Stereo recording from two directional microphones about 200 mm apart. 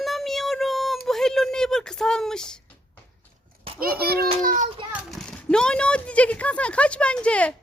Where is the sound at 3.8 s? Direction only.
50° right (ahead or behind).